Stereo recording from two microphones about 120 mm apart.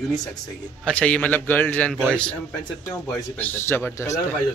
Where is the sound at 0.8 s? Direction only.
10° left (ahead or behind).